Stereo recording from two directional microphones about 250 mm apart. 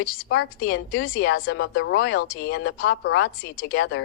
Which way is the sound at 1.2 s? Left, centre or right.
Left.